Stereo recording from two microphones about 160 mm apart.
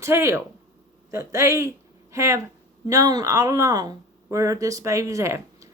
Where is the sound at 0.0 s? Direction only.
15° right (ahead or behind).